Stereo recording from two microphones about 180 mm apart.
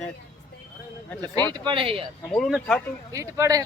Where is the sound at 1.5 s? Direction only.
25° right (ahead or behind).